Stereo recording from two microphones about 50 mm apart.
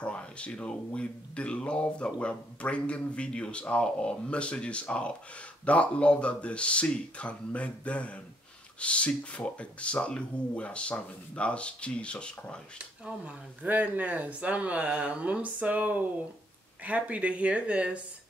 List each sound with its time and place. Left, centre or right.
0.0 s speech: left
13.0 s speech: right